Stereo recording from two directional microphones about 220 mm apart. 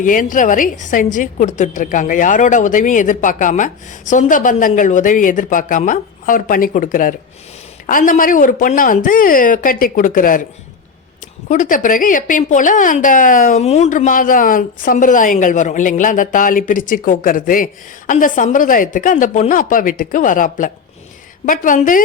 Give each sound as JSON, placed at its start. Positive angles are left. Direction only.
{"t": 0.0, "sound": "a woman's voice", "side_deg": 35}
{"t": 11.4, "sound": "a woman's voice", "side_deg": 35}